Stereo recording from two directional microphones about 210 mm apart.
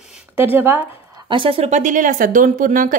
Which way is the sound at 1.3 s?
25° right (ahead or behind).